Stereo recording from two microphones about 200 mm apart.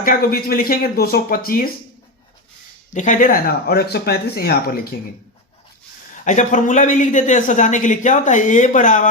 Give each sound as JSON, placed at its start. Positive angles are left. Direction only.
{"t": 0.0, "sound": "speech", "side_deg": 45}
{"t": 2.9, "sound": "speech", "side_deg": 40}
{"t": 6.2, "sound": "speech", "side_deg": 40}